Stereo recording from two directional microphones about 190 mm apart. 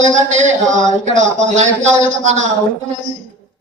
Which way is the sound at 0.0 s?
40° right (ahead or behind).